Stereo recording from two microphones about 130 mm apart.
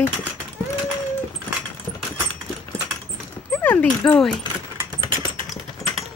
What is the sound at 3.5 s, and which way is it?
Speech, 15° left (ahead or behind).